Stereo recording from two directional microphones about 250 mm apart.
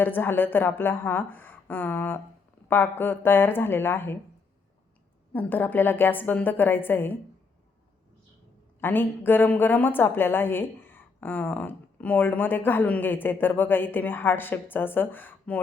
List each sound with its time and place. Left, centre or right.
0.0 s a woman's voice: centre
5.3 s a woman's voice: centre
8.8 s a woman's voice: centre